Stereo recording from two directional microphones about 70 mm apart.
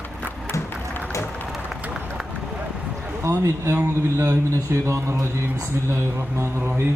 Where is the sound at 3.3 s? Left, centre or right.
Right.